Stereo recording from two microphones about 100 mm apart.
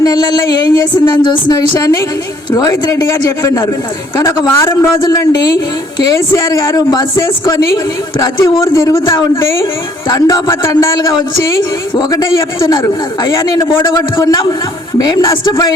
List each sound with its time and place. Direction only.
0.0 s speech: 40° left (ahead or behind)
4.9 s speech: 40° left (ahead or behind)
8.2 s a man's voice: 50° left (ahead or behind)
8.6 s speech: 30° left (ahead or behind)
11.9 s a man's voice: 45° left (ahead or behind)
13.8 s speech: 30° left (ahead or behind)